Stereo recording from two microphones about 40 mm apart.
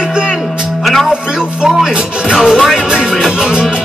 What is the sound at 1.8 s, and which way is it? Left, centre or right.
Music, centre.